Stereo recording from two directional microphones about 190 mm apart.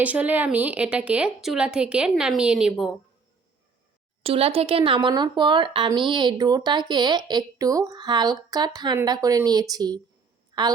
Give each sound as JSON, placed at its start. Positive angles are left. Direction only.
{"t": 0.0, "sound": "a woman's voice", "side_deg": -10}
{"t": 4.2, "sound": "speech", "side_deg": -30}
{"t": 10.5, "sound": "a sound", "side_deg": -20}